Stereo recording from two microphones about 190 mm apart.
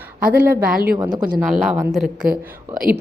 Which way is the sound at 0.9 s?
20° right (ahead or behind).